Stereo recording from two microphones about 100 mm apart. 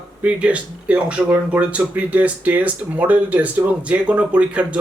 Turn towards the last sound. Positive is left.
turn(degrees=-10)  # may be behind; listen again after turning